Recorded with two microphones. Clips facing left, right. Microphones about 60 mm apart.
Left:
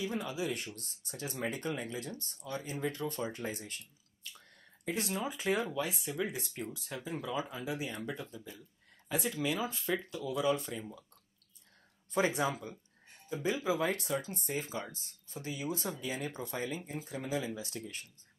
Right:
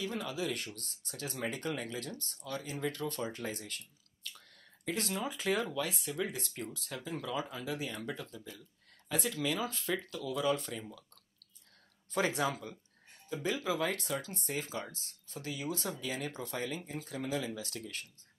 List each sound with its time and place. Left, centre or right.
0.0 s speech: centre
12.1 s speech: centre